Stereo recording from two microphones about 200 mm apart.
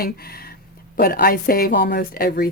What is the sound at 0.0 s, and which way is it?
A woman's voice, 50° left (ahead or behind).